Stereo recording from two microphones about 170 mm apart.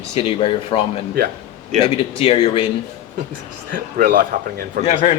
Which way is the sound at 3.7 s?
55° right (ahead or behind).